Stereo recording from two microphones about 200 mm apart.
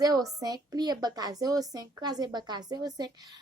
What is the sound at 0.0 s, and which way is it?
A woman's voice, 20° right (ahead or behind).